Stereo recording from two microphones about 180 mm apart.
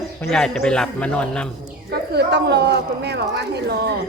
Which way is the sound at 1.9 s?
65° right (ahead or behind).